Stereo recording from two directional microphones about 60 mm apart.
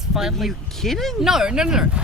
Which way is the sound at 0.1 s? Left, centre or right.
Centre.